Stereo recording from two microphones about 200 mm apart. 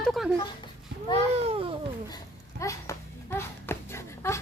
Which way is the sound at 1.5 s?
30° right (ahead or behind).